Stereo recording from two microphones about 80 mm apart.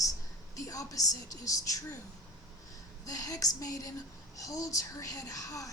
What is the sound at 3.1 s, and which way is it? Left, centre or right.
A woman's voice, left.